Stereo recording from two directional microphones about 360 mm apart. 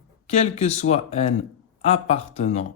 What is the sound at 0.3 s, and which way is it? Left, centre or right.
Speech, centre.